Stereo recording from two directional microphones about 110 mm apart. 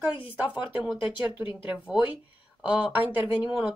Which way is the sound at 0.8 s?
45° left (ahead or behind).